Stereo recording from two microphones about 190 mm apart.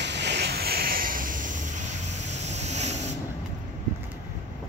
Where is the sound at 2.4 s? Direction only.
35° right (ahead or behind).